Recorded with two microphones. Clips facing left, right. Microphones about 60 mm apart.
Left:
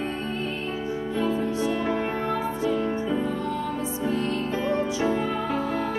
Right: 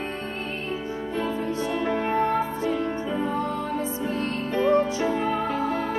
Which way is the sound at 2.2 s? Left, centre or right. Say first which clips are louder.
Right 1 dB; right.